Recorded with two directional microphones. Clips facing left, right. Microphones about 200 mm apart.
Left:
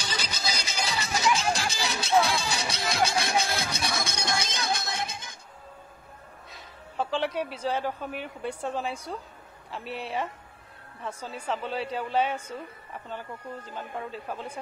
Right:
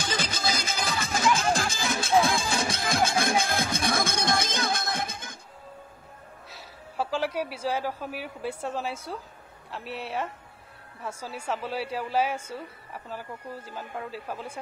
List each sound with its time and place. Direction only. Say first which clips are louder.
0.0 s music: right 4 dB; 50° right (ahead or behind)
7.0 s a woman's voice: even; 5° right (ahead or behind)